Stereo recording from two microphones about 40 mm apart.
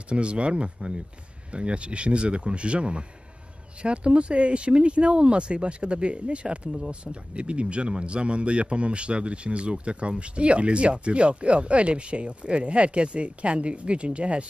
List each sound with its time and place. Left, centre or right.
0.1 s a man's voice: right